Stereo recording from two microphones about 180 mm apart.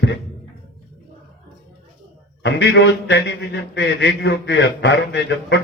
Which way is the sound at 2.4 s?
75° left (ahead or behind).